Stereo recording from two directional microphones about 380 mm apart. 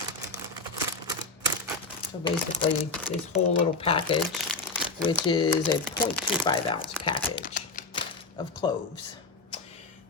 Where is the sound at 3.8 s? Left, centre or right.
Centre.